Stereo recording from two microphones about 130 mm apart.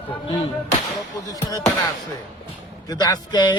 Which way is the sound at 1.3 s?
25° left (ahead or behind).